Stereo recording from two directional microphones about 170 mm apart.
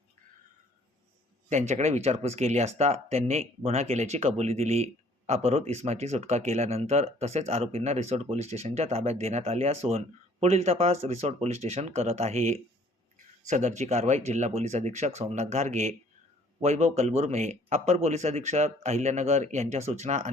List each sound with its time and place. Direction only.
1.5 s speech: 45° right (ahead or behind)